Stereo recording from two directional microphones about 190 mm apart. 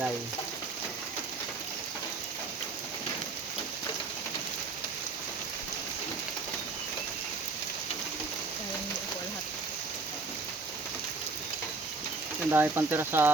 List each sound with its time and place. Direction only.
12.5 s speech: 10° right (ahead or behind)